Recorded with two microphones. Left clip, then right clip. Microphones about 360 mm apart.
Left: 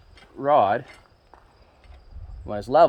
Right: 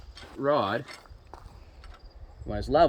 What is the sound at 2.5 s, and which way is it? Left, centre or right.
Speech, centre.